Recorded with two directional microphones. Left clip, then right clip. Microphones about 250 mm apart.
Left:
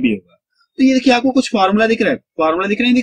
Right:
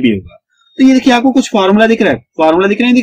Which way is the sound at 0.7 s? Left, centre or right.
Centre.